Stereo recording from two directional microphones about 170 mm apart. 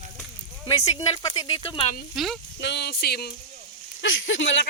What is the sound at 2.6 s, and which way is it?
Speech, 80° left.